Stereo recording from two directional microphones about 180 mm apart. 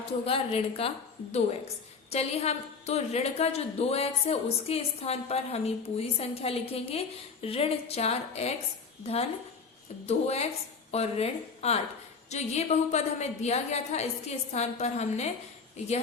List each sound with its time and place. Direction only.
0.0 s a woman's voice: 30° left (ahead or behind)
10.1 s a woman's voice: 35° left (ahead or behind)